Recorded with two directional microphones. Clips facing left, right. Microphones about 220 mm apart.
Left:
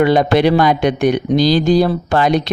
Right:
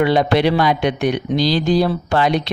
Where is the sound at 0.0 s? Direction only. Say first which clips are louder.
Left 3 dB; 45° left (ahead or behind).